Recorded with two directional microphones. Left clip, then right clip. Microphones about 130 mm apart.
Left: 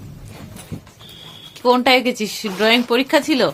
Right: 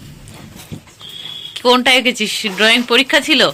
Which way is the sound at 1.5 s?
5° right (ahead or behind).